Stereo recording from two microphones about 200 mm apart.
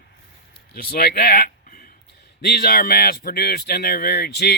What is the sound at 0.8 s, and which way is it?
Speech, 50° left (ahead or behind).